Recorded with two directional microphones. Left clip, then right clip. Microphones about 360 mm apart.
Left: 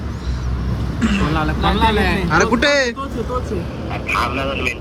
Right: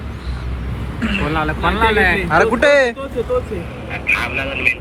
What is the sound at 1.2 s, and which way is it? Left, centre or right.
A man's voice, centre.